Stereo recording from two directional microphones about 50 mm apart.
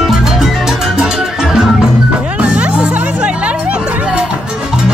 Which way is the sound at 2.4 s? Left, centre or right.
Right.